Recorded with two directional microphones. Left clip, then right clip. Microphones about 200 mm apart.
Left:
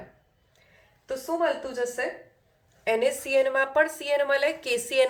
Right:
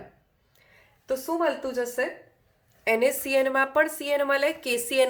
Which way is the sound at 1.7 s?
35° right (ahead or behind).